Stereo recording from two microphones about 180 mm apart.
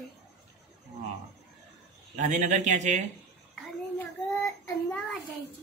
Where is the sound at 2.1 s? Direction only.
45° right (ahead or behind).